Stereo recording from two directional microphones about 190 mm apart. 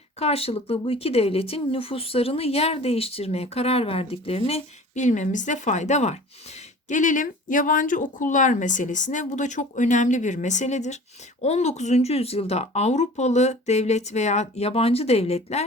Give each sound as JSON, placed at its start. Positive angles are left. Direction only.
{"t": 0.2, "sound": "speech", "side_deg": 30}